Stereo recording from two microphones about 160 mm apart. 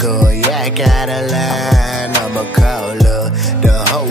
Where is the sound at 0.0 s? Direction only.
Centre (ahead or behind).